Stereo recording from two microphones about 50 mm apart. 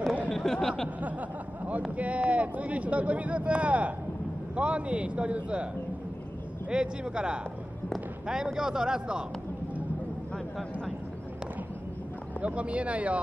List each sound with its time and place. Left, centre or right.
0.3 s speech: centre
1.6 s speech: right
6.7 s a man's voice: centre
12.4 s speech: right